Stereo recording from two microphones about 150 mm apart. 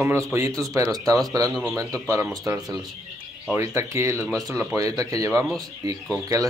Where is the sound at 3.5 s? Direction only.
20° right (ahead or behind).